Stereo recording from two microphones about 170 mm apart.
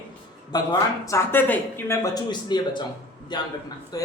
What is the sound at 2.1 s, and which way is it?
Speech, 25° left (ahead or behind).